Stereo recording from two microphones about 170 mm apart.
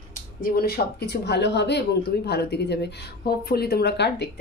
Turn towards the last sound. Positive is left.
turn(degrees=80)